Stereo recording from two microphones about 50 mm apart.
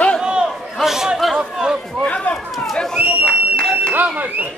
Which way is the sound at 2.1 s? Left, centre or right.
Left.